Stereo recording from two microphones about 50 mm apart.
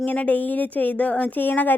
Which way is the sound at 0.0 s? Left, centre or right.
Left.